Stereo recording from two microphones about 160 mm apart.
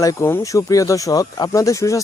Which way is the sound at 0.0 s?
20° left (ahead or behind).